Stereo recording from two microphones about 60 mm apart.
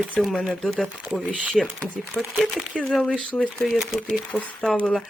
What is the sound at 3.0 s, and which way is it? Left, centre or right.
Speech, centre.